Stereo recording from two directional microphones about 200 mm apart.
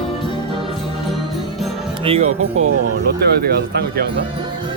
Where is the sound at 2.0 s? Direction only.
30° right (ahead or behind).